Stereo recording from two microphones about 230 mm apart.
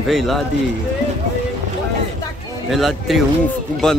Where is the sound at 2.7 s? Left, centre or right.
Centre.